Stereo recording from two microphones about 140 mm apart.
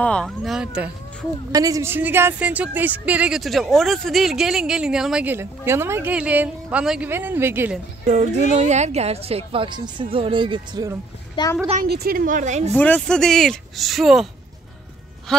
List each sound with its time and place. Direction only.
0.0 s speech: 5° left (ahead or behind)
1.5 s a woman's voice: 25° right (ahead or behind)
8.0 s a woman's voice: 55° right (ahead or behind); by 10.9 s 35° right (ahead or behind)
11.4 s a woman's voice: 35° left (ahead or behind)
11.8 s a woman's voice: 90° right; by 12.7 s 55° right (ahead or behind)
12.7 s speech: 10° left (ahead or behind)